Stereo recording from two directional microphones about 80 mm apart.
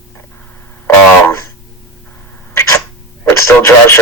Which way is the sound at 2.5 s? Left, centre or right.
Left.